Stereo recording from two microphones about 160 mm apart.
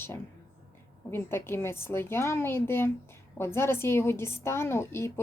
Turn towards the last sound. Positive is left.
turn(degrees=15)  # may be behind; listen again after turning